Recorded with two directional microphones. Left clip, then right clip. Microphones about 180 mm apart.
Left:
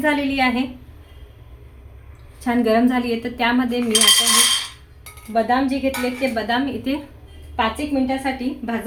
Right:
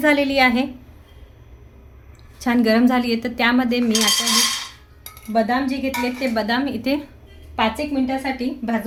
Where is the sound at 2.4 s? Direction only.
60° right (ahead or behind).